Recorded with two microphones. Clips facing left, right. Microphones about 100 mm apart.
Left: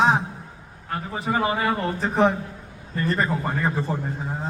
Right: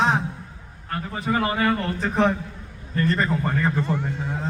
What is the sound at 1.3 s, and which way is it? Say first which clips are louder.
Speech: right 1 dB; 15° left (ahead or behind).